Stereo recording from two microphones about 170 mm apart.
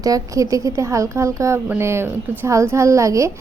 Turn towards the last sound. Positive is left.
turn(degrees=-20)  # may be behind; listen again after turning